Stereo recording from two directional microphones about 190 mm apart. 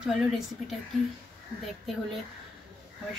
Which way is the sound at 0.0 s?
Centre (ahead or behind).